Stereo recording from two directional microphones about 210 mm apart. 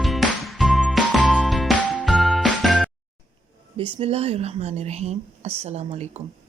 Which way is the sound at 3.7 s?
30° right (ahead or behind).